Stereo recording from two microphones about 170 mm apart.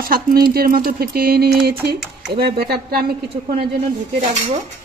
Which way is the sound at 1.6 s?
70° right (ahead or behind).